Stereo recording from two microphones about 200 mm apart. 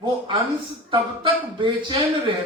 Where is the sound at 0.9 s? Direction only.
25° right (ahead or behind).